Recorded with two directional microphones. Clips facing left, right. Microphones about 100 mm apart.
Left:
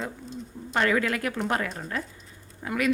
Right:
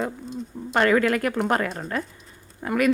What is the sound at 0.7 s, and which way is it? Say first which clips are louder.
A woman's voice: right 5 dB; 50° right (ahead or behind).